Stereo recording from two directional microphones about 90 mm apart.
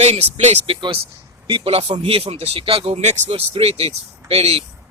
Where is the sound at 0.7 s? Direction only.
75° right (ahead or behind).